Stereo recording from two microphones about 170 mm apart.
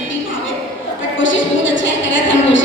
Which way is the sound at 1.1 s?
90° left.